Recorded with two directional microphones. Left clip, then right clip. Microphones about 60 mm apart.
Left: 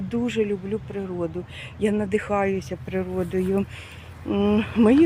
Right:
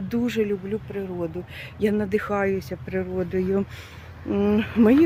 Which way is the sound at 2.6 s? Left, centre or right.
Centre.